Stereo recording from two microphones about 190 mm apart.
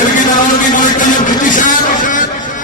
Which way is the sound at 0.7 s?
45° left (ahead or behind).